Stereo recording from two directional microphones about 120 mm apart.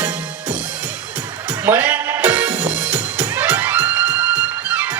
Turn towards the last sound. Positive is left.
turn(degrees=-15)  # may be behind; listen again after turning